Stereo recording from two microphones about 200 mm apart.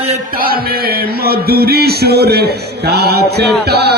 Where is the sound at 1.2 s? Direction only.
50° right (ahead or behind).